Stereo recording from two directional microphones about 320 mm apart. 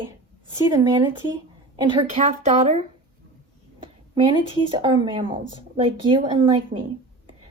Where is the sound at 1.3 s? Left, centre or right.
Centre.